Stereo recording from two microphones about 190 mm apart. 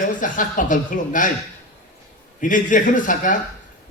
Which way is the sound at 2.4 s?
45° left (ahead or behind).